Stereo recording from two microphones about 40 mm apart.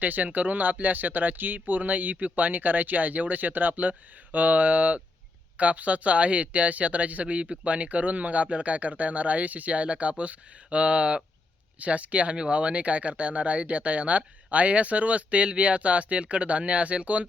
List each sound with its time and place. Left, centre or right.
0.0 s speech: right